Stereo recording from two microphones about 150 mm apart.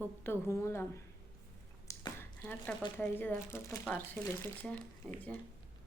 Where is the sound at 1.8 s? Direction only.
20° left (ahead or behind).